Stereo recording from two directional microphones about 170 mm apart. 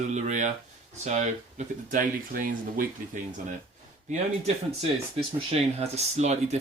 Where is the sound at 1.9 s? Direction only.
55° right (ahead or behind).